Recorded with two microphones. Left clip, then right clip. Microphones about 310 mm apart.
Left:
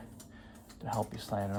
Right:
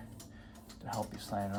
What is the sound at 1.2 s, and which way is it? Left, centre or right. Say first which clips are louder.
Speech: left 2 dB; centre.